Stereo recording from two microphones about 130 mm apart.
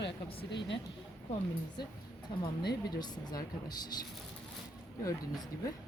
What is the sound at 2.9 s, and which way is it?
Speech, 30° left (ahead or behind).